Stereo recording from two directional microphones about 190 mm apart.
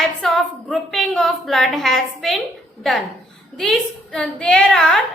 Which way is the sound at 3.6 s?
Centre (ahead or behind).